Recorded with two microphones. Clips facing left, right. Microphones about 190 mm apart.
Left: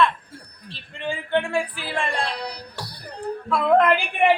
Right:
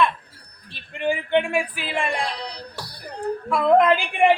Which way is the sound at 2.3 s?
10° left (ahead or behind).